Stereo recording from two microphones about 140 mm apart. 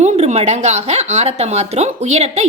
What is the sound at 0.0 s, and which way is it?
A woman's voice, 55° right (ahead or behind).